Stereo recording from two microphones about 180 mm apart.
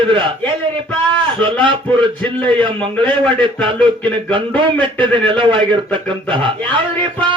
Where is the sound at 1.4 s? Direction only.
30° right (ahead or behind).